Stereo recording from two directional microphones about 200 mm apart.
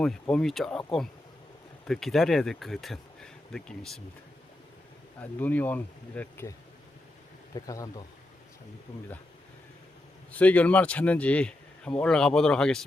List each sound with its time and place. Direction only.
0.0 s speech: 5° left (ahead or behind)
1.9 s speech: centre (ahead or behind)
5.2 s speech: 10° left (ahead or behind)
7.5 s speech: 20° left (ahead or behind)
10.3 s speech: 5° left (ahead or behind)